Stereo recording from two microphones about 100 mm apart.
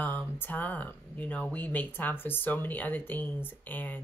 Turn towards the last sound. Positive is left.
turn(degrees=20)  # may be behind; listen again after turning